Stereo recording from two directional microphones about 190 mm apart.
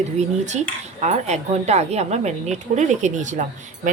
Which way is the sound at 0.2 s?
40° right (ahead or behind).